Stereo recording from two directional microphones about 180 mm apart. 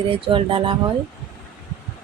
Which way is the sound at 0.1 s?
30° right (ahead or behind).